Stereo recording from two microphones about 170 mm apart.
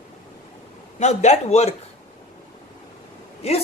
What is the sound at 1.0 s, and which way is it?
Speech, 40° left (ahead or behind).